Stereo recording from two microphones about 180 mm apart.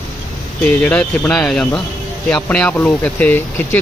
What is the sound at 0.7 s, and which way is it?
Speech, 10° left (ahead or behind).